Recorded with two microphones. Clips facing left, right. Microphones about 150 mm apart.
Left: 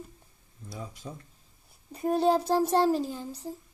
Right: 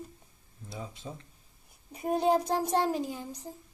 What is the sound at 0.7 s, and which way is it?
Speech, 25° right (ahead or behind).